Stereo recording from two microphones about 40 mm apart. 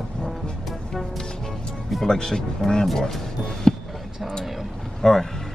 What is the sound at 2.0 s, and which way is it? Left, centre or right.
Speech, centre.